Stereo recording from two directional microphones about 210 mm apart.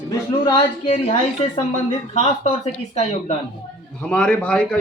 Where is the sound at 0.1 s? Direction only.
20° left (ahead or behind).